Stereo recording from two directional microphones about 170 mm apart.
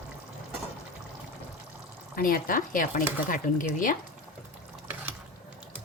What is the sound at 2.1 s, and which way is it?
Speech, 60° left (ahead or behind).